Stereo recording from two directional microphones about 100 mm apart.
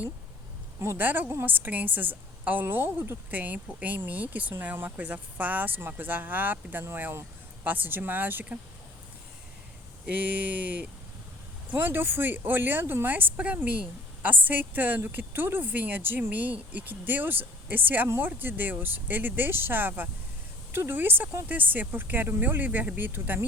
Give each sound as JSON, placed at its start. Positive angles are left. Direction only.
{"t": 0.8, "sound": "speech", "side_deg": -25}
{"t": 10.1, "sound": "speech", "side_deg": -15}